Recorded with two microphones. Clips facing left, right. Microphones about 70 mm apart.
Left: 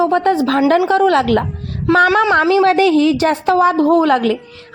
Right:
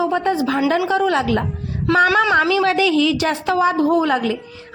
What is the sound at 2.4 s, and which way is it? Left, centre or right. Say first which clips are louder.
A woman's voice: left 5 dB; left.